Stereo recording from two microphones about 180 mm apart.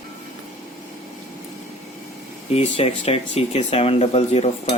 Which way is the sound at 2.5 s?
35° left (ahead or behind).